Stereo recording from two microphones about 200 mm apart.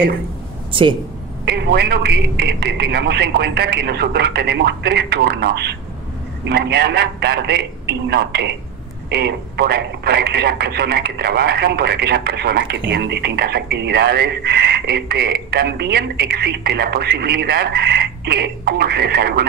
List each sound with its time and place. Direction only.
0.7 s speech: 25° right (ahead or behind)
1.4 s a man's voice: 55° right (ahead or behind)